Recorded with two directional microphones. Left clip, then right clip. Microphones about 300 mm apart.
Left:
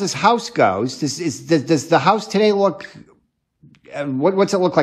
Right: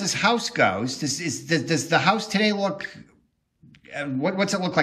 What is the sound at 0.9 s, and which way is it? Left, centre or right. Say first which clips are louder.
A man's voice: left 4 dB; left.